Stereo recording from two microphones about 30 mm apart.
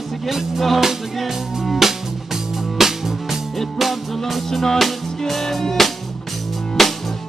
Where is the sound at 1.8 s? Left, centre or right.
Centre.